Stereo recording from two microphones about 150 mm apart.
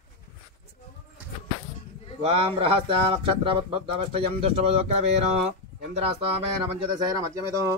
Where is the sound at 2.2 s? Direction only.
35° right (ahead or behind).